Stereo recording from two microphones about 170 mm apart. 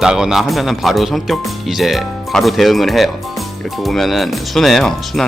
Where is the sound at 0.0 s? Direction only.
5° right (ahead or behind).